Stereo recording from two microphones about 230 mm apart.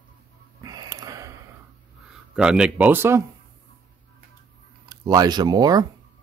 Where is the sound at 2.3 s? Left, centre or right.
Centre.